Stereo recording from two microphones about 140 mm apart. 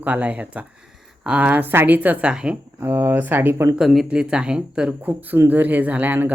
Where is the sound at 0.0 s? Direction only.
10° right (ahead or behind).